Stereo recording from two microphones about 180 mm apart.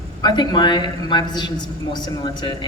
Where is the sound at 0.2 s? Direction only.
25° left (ahead or behind).